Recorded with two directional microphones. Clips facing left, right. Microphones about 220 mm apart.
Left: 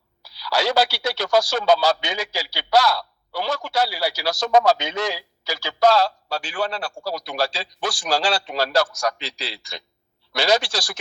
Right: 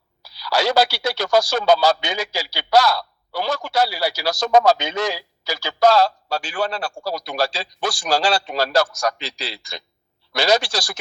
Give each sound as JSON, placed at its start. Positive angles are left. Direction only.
{"t": 0.2, "sound": "speech", "side_deg": -45}